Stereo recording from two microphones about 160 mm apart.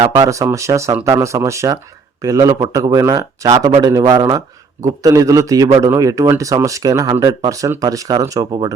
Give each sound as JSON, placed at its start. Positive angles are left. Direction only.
{"t": 0.3, "sound": "a man's voice", "side_deg": -20}